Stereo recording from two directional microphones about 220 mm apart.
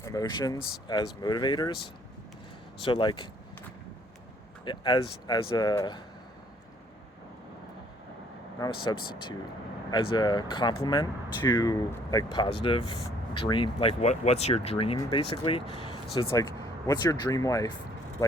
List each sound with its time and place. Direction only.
0.0 s speech: 15° left (ahead or behind)
2.8 s speech: 20° left (ahead or behind)
4.6 s speech: 20° left (ahead or behind)
8.8 s speech: 20° left (ahead or behind)